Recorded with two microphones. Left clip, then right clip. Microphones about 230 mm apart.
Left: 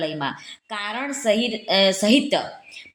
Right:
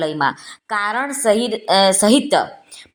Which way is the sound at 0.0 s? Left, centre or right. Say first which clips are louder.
Right 7 dB; right.